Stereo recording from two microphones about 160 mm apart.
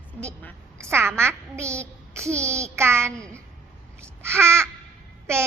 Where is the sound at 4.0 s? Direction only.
15° right (ahead or behind).